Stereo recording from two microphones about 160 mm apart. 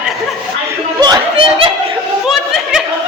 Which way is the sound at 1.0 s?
30° right (ahead or behind).